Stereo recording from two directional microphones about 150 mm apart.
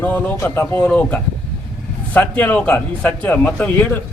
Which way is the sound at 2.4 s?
10° left (ahead or behind).